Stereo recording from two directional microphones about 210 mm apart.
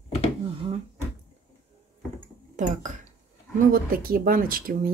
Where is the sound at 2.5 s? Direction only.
35° right (ahead or behind).